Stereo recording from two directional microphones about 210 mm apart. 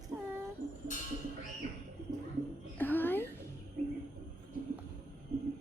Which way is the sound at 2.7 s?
10° left (ahead or behind).